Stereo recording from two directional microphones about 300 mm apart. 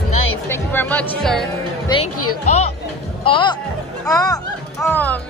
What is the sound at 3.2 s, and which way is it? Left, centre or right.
Speech, centre.